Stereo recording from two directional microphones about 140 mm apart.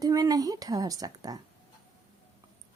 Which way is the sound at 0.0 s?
25° right (ahead or behind).